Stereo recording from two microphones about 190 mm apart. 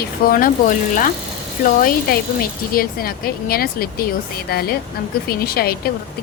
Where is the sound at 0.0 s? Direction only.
50° left (ahead or behind).